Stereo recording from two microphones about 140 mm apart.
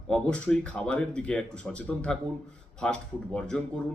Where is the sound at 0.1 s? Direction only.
5° left (ahead or behind).